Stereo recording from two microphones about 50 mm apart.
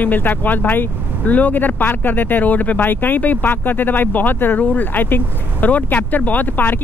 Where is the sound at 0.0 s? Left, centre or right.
Left.